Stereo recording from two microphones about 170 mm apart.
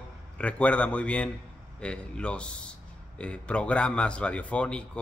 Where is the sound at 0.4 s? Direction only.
5° left (ahead or behind).